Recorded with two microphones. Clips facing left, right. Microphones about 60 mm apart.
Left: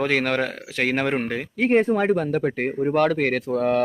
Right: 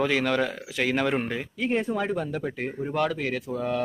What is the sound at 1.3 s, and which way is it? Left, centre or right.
Speech, left.